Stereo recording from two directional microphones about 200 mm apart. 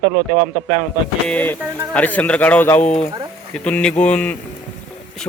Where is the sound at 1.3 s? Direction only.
10° left (ahead or behind).